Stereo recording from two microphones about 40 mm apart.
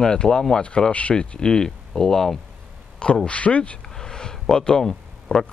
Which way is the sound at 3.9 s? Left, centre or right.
Centre.